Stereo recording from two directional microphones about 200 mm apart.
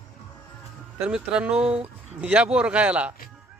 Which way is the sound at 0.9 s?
5° right (ahead or behind).